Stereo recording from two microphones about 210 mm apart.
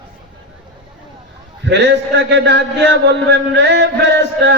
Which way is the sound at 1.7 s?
55° right (ahead or behind).